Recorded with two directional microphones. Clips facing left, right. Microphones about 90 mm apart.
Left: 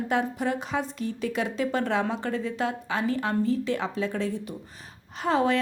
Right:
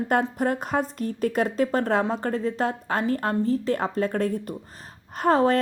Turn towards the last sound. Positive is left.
turn(degrees=-45)  # may be behind; listen again after turning